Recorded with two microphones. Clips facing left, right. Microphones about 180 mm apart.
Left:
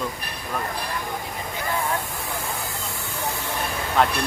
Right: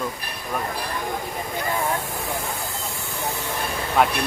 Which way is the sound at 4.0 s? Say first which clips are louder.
Right 1 dB; 10° right (ahead or behind).